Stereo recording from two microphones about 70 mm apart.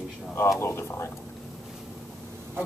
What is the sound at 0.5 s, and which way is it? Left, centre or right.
Speech, left.